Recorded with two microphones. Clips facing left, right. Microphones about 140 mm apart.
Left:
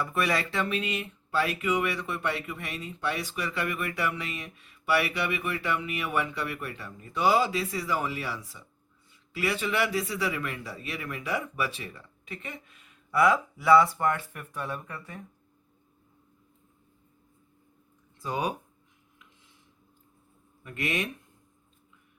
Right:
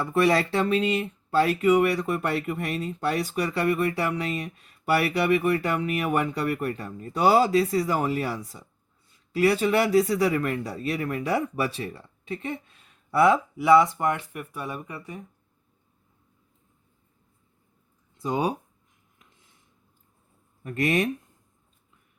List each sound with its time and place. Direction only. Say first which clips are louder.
0.0 s speech: right 7 dB; 30° right (ahead or behind); by 15.2 s 15° right (ahead or behind)
18.2 s speech: right 5 dB; 20° right (ahead or behind)
20.7 s speech: right 7 dB; 40° right (ahead or behind)